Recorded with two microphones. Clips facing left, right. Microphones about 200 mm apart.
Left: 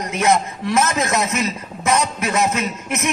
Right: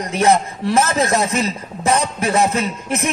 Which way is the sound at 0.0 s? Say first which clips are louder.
Right 2 dB; 35° right (ahead or behind).